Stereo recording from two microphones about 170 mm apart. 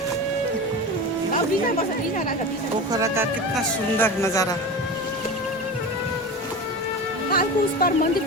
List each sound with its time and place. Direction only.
2.9 s speech: 20° right (ahead or behind)
3.9 s speech: 15° left (ahead or behind)
7.3 s music: 60° left (ahead or behind)